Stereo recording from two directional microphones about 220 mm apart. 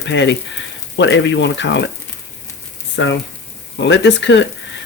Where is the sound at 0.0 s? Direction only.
55° left (ahead or behind).